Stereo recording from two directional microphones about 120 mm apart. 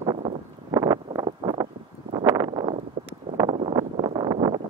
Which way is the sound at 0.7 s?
30° right (ahead or behind).